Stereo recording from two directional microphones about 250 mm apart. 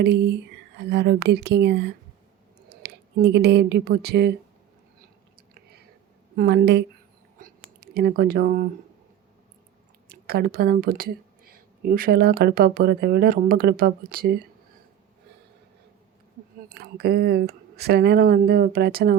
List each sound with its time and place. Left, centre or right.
0.0 s speech: right
6.3 s speech: right
7.4 s whispering: right
7.9 s speech: right
10.1 s speech: right
16.6 s speech: right